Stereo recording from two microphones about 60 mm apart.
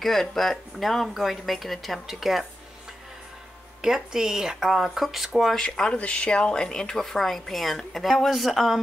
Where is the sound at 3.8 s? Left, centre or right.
Centre.